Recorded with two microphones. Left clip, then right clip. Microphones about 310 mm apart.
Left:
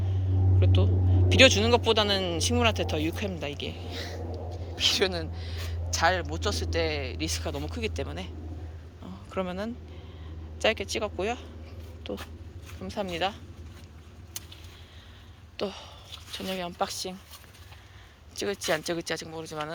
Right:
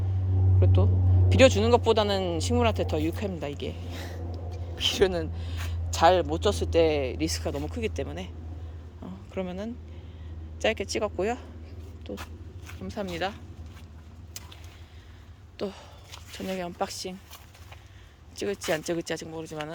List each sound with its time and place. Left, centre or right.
0.6 s speech: centre
12.0 s vehicle: centre
12.8 s speech: centre
15.5 s speech: centre
18.3 s speech: centre